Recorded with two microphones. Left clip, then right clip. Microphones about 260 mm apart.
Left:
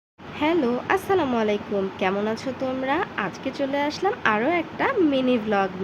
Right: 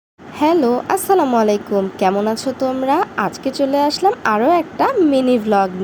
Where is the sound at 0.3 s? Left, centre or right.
Centre.